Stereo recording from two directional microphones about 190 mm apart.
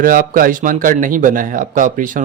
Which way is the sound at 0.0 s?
50° right (ahead or behind).